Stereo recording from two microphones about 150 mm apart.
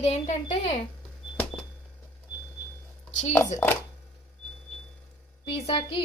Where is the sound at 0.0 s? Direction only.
45° left (ahead or behind).